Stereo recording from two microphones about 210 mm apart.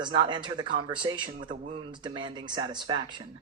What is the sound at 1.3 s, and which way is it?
Speech, 40° right (ahead or behind).